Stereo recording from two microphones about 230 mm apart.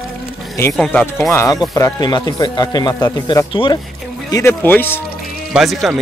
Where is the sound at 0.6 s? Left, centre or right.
Centre.